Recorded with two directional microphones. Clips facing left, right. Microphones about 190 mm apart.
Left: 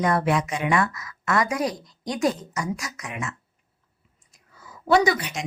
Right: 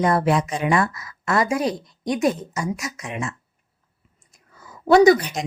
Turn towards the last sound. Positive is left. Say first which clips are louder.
# right 7 dB
turn(degrees=-35)  # may be behind; listen again after turning